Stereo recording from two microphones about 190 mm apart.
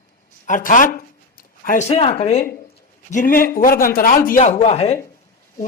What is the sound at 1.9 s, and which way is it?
Speech, 30° left (ahead or behind).